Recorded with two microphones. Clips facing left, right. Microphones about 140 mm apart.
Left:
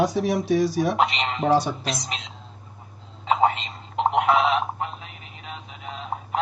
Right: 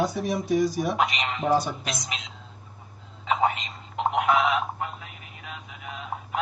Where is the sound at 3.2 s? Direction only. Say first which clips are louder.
Left 3 dB; 30° left (ahead or behind).